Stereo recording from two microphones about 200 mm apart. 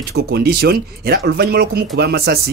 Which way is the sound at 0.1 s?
50° right (ahead or behind).